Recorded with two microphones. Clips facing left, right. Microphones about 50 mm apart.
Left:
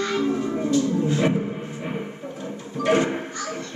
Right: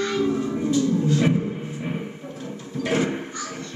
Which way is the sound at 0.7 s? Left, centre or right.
Left.